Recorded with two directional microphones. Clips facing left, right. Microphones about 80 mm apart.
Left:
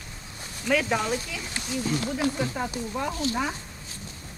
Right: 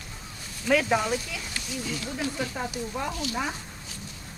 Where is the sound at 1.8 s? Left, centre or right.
Left.